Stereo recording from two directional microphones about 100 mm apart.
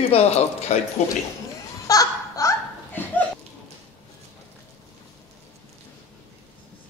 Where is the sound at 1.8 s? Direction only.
35° left (ahead or behind).